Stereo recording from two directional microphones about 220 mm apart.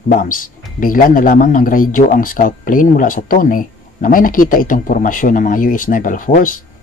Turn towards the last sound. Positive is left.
turn(degrees=35)  # may be behind; listen again after turning